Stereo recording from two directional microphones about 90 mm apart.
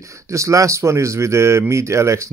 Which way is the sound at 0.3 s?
35° right (ahead or behind).